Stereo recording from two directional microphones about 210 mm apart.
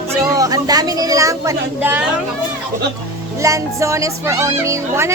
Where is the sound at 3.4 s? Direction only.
15° right (ahead or behind).